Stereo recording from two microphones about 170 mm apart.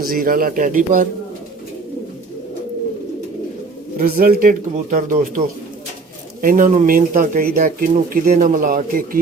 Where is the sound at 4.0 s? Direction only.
60° right (ahead or behind).